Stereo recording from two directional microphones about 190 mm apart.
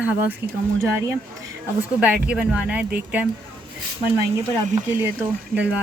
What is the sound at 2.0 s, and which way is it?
Speech, 5° right (ahead or behind).